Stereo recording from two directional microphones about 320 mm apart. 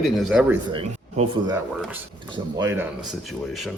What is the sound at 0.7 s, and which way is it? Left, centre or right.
Speech, centre.